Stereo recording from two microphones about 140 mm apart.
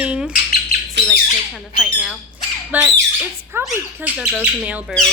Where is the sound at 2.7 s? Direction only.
10° right (ahead or behind).